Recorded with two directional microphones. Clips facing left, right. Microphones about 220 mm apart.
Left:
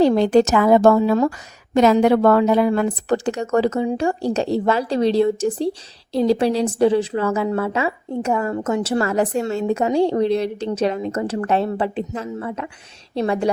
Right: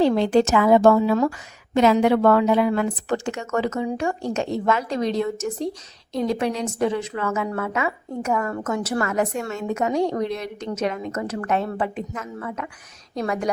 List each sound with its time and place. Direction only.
0.0 s a woman's voice: 40° left (ahead or behind)